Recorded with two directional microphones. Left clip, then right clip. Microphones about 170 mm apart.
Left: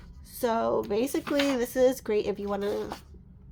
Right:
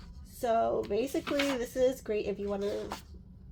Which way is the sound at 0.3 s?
35° left (ahead or behind).